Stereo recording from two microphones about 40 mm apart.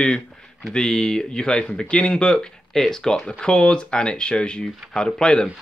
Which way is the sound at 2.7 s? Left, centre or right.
Centre.